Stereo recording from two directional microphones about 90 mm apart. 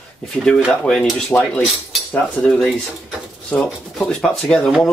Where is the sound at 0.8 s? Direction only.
10° left (ahead or behind).